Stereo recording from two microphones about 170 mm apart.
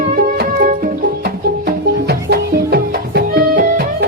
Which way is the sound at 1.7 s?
70° right (ahead or behind).